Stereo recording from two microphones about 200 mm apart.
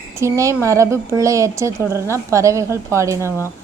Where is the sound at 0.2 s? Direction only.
15° right (ahead or behind).